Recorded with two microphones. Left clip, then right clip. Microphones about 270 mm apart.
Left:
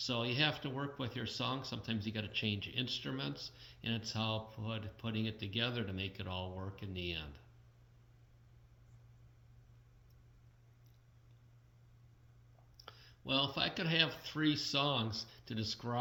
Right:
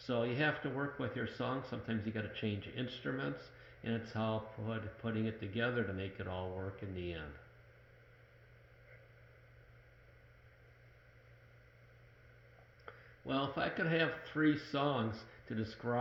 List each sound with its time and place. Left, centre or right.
0.0 s speech: left
12.8 s speech: left